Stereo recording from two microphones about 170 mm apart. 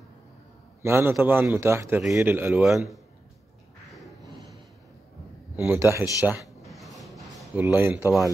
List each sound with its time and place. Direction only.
0.8 s a man's voice: 15° right (ahead or behind)
2.0 s a man's voice: 5° right (ahead or behind)
4.2 s a sound: 20° right (ahead or behind)
5.6 s a man's voice: 15° right (ahead or behind)
6.2 s a sound: 5° right (ahead or behind)
7.5 s a man's voice: 15° right (ahead or behind)